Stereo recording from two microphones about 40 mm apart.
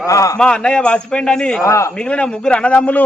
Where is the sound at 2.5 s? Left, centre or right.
Left.